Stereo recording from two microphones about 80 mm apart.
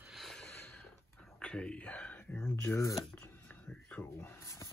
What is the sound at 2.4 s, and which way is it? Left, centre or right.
Speech, left.